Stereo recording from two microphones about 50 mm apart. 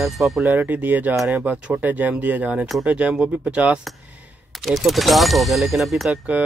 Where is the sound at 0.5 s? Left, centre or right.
Right.